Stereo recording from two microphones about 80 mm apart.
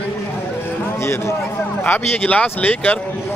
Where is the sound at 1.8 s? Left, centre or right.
Left.